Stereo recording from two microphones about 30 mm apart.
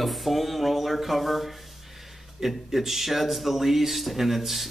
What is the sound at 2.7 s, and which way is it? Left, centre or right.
Dishes, centre.